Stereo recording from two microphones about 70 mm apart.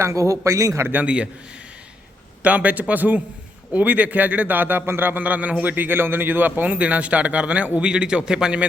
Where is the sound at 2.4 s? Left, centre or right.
Right.